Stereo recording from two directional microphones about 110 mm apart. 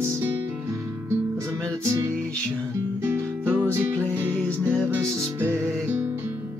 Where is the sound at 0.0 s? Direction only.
25° right (ahead or behind).